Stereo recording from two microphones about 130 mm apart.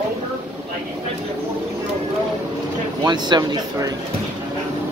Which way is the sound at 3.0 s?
35° right (ahead or behind).